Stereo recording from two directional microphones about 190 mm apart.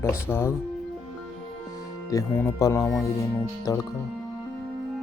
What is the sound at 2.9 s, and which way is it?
Speech, 5° left (ahead or behind).